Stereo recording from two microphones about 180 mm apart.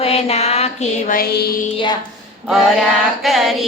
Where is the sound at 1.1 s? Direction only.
55° left (ahead or behind).